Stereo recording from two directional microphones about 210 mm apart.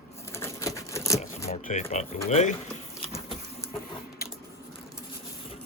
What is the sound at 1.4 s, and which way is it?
Speech, 35° left (ahead or behind).